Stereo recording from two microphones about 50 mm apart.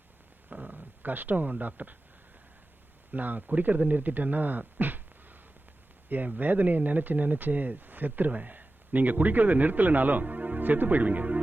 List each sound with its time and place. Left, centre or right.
0.5 s speech: right
3.1 s speech: right